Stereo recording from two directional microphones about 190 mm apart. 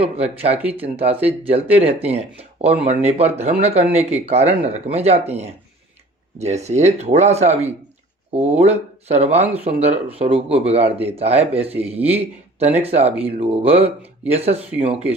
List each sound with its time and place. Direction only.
0.0 s speech: 35° right (ahead or behind)
6.7 s speech: 35° right (ahead or behind)